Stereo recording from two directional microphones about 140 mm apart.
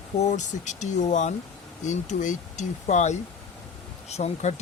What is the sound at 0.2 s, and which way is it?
Speech, 55° left (ahead or behind).